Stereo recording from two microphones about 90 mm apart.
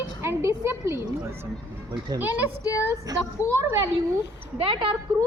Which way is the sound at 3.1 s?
45° right (ahead or behind).